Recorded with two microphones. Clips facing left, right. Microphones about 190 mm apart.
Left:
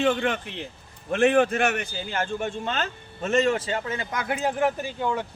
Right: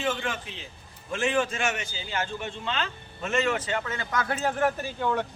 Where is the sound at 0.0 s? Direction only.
60° left (ahead or behind); by 3.9 s 30° left (ahead or behind).